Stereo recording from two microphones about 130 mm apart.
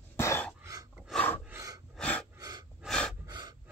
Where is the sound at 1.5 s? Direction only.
25° right (ahead or behind).